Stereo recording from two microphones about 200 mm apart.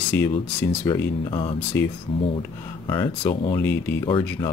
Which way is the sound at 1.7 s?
10° left (ahead or behind).